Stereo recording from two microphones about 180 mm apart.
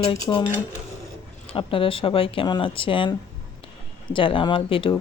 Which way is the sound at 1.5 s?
30° left (ahead or behind).